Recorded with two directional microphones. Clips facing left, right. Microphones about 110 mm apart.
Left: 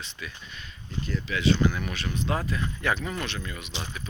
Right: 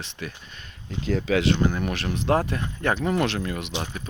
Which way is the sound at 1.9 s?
65° right (ahead or behind).